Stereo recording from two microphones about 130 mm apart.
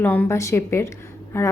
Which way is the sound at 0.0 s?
15° left (ahead or behind).